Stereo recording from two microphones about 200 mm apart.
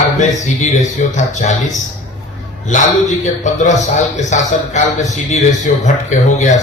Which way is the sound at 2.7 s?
40° left (ahead or behind).